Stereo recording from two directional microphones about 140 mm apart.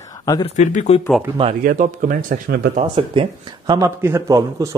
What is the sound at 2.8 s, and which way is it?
Speech, 45° right (ahead or behind).